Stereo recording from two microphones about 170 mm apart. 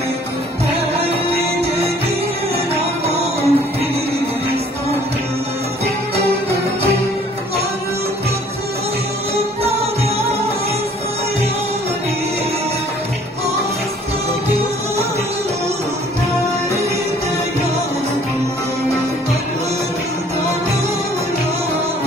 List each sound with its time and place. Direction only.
2.7 s music: 35° right (ahead or behind)